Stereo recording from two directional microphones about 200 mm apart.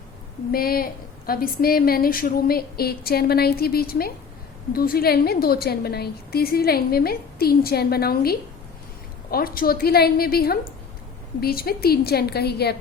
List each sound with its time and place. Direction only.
0.5 s a woman's voice: 50° left (ahead or behind)